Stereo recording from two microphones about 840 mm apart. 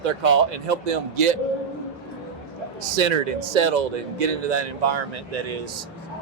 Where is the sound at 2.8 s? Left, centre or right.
Right.